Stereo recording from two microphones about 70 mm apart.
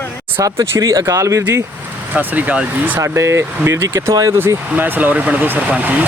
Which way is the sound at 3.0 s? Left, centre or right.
Right.